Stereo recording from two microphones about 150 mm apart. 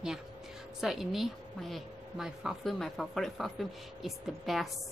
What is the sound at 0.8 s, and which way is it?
Speech, centre (ahead or behind).